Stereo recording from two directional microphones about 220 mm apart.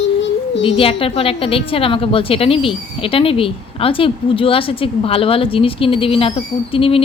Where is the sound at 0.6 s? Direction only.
25° left (ahead or behind).